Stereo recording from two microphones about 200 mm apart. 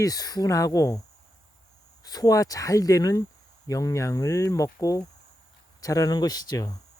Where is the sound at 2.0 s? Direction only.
20° left (ahead or behind).